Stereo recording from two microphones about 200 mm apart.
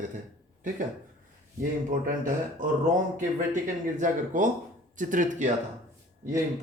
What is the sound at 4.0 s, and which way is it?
Speech, 40° right (ahead or behind).